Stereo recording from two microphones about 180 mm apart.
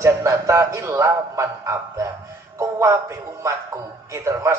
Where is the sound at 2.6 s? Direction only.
15° right (ahead or behind).